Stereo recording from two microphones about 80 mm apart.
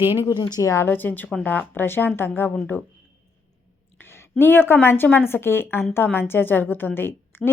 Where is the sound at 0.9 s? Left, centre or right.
Left.